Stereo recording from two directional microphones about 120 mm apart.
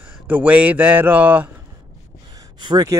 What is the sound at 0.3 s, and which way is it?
Speech, 10° right (ahead or behind).